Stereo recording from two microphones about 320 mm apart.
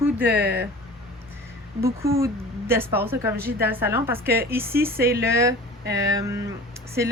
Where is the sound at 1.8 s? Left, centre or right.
Centre.